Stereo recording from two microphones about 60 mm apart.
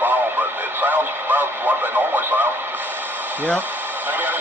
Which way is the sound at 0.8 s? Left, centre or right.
Right.